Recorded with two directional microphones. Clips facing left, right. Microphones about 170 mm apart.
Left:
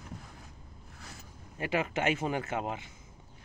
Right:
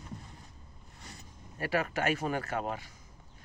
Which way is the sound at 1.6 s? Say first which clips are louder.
Left 1 dB; 20° left (ahead or behind).